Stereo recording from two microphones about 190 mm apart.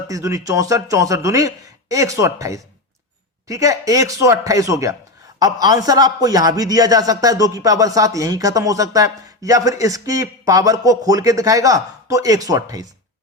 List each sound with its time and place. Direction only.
0.1 s a man's voice: 15° right (ahead or behind)